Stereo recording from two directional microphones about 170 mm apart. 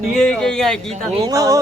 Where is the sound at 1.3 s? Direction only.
20° right (ahead or behind).